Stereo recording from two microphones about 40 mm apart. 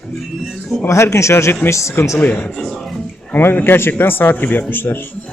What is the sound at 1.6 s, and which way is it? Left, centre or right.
Speech, left.